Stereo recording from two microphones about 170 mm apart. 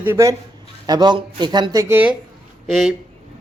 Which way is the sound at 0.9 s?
25° right (ahead or behind).